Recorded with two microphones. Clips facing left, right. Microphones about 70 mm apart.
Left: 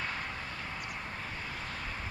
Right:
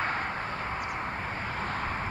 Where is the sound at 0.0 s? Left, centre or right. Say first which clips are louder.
Right 7 dB; right.